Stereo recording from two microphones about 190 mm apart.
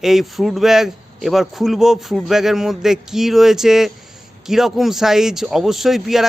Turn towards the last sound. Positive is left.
turn(degrees=0)  # may be behind; listen again after turning